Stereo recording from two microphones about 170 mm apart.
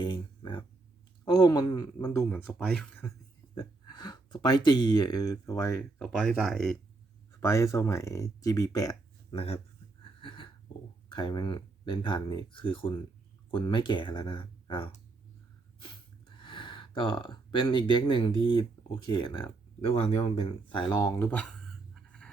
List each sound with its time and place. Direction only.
0.0 s a sound: 25° left (ahead or behind)
1.2 s speech: 20° left (ahead or behind)
2.3 s speech: 10° left (ahead or behind)
3.5 s speech: 25° left (ahead or behind)
6.0 s speech: 5° left (ahead or behind)
7.3 s speech: 15° left (ahead or behind)
9.3 s speech: 35° left (ahead or behind)
10.2 s a sound: 30° left (ahead or behind)
11.1 s speech: 25° left (ahead or behind)
16.4 s speech: 30° left (ahead or behind)
21.2 s speech: 10° left (ahead or behind)
21.7 s a sound: 5° left (ahead or behind)